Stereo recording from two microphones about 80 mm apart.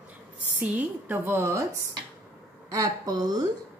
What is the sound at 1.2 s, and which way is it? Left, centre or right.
Speech, right.